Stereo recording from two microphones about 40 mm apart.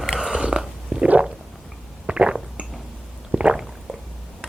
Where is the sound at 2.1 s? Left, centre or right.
Right.